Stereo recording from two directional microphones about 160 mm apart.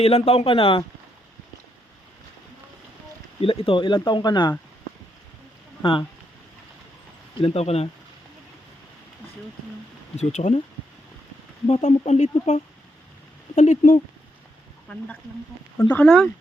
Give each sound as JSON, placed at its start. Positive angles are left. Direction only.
{"t": 0.0, "sound": "speech", "side_deg": 40}
{"t": 3.4, "sound": "speech", "side_deg": 35}
{"t": 5.8, "sound": "speech", "side_deg": 30}
{"t": 7.3, "sound": "speech", "side_deg": 35}
{"t": 10.2, "sound": "speech", "side_deg": 45}
{"t": 11.7, "sound": "speech", "side_deg": 45}
{"t": 15.8, "sound": "speech", "side_deg": 10}